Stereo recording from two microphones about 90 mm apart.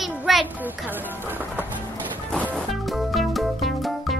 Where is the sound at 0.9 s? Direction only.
20° right (ahead or behind).